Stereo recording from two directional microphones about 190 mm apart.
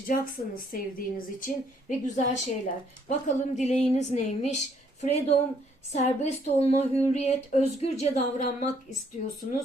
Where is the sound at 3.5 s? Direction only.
35° left (ahead or behind).